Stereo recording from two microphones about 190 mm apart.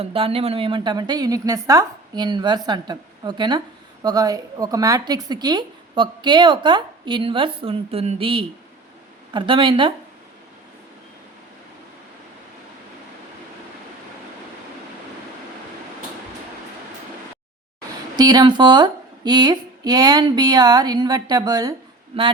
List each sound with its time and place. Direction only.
0.0 s a woman's voice: 30° right (ahead or behind)
17.7 s a woman's voice: 20° right (ahead or behind)